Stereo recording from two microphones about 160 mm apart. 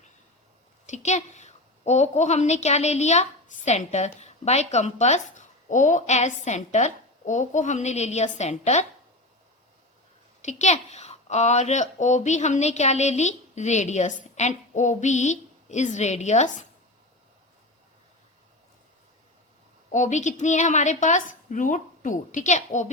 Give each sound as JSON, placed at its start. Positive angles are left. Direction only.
{"t": 0.9, "sound": "a woman's voice", "side_deg": 45}
{"t": 10.4, "sound": "a woman's voice", "side_deg": 45}
{"t": 19.9, "sound": "a woman's voice", "side_deg": 50}